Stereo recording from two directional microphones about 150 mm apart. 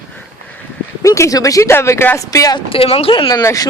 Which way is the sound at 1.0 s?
20° left (ahead or behind).